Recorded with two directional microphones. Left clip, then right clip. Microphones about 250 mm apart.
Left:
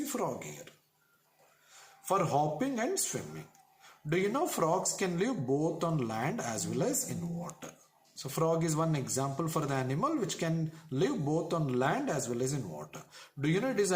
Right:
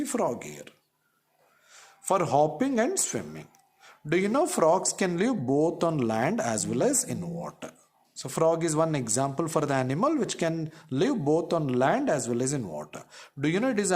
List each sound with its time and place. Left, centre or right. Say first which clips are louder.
0.0 s speech: right 7 dB; right
2.0 s speech: right 6 dB; right